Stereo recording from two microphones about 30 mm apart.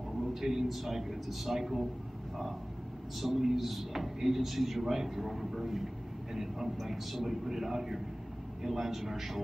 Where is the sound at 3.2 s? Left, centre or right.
Centre.